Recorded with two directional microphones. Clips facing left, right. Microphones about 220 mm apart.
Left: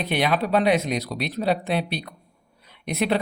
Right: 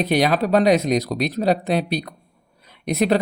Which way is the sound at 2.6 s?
40° right (ahead or behind).